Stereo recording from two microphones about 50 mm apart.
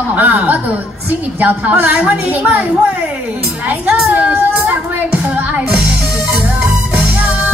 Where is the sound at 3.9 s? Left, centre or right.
Right.